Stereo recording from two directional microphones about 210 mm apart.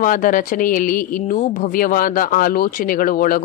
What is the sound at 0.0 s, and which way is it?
Speech, 40° left (ahead or behind).